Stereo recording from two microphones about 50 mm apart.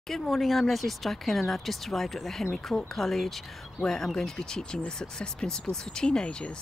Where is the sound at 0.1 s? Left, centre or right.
Centre.